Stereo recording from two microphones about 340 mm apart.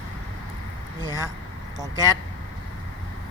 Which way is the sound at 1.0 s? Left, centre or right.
Centre.